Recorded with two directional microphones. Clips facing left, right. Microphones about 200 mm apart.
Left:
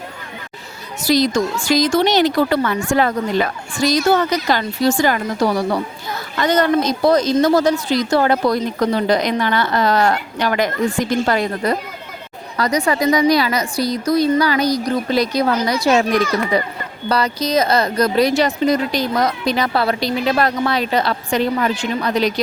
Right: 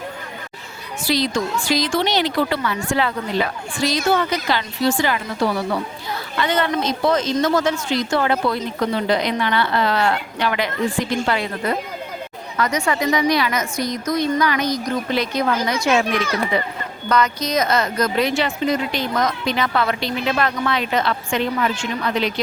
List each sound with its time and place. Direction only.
1.0 s speech: 45° left (ahead or behind)